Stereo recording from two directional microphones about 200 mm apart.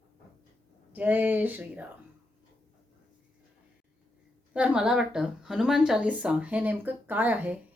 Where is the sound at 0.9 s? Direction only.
10° right (ahead or behind).